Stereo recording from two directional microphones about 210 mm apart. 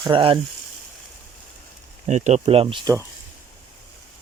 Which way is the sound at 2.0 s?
35° right (ahead or behind).